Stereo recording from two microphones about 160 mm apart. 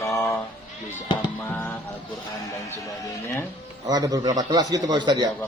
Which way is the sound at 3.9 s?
25° right (ahead or behind).